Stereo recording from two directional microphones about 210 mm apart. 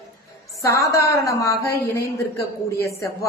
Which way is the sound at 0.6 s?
15° left (ahead or behind).